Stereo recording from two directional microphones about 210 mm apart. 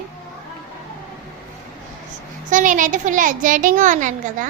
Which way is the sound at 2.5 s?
35° right (ahead or behind).